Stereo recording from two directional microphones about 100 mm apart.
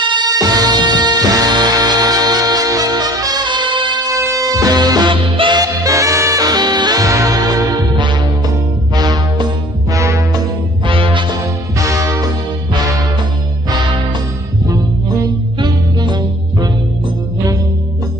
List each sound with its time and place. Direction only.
0.0 s music: 50° right (ahead or behind)
4.1 s music: 35° right (ahead or behind)
5.1 s music: 60° right (ahead or behind)
5.6 s music: 35° right (ahead or behind)
8.9 s music: 45° right (ahead or behind)
9.9 s music: 30° right (ahead or behind)
10.9 s music: 60° right (ahead or behind)
11.8 s music: 35° right (ahead or behind)
14.7 s music: 40° right (ahead or behind)